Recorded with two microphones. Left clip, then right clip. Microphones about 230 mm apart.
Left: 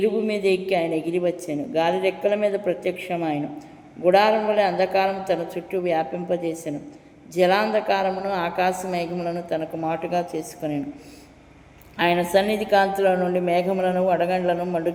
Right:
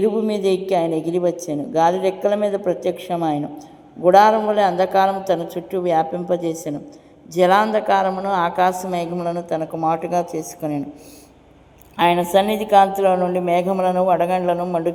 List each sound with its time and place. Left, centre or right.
0.0 s a man's voice: right
7.3 s a man's voice: right
11.9 s a man's voice: centre